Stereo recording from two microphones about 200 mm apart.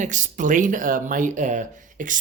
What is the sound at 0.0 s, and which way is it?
Speech, 40° right (ahead or behind).